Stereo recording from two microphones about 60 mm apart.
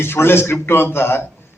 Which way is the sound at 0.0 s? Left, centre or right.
Left.